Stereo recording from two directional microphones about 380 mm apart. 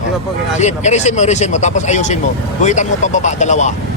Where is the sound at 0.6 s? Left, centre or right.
Centre.